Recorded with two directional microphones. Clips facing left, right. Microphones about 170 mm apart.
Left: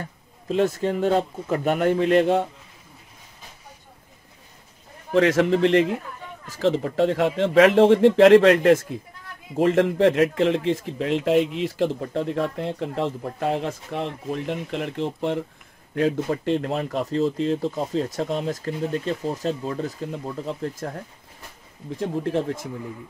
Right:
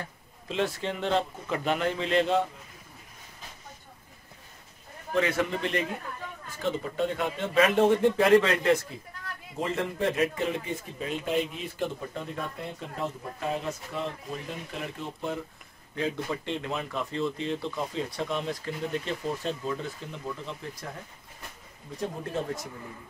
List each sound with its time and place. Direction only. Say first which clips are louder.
0.7 s speech: left 7 dB; 45° left (ahead or behind)
5.1 s speech: left 9 dB; 80° left
6.4 s speech: left 9 dB; 90° left; by 16.3 s 60° left (ahead or behind)
16.4 s speech: left 9 dB; 40° left (ahead or behind)
22.0 s speech: left 8 dB; 75° left (ahead or behind)